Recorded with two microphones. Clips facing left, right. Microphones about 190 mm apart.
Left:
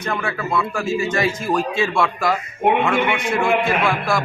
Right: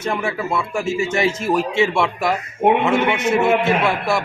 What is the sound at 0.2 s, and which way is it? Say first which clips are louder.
A man's voice: even; 25° right (ahead or behind).